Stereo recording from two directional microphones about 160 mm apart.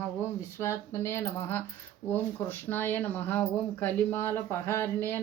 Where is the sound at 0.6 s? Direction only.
15° left (ahead or behind).